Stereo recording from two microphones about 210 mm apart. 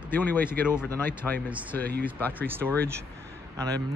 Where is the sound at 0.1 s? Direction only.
10° left (ahead or behind).